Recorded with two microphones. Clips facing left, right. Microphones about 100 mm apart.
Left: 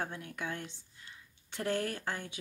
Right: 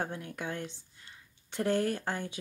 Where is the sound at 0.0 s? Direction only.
35° right (ahead or behind).